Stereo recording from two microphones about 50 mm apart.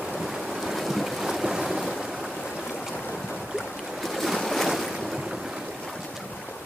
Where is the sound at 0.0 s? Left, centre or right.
Centre.